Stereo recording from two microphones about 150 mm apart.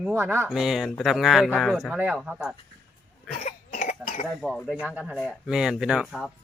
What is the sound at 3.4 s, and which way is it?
Cough, 55° left (ahead or behind).